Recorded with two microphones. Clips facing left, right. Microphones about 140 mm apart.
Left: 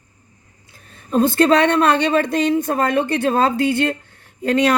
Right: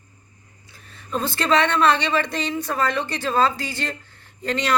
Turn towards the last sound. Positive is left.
turn(degrees=55)  # may be behind; listen again after turning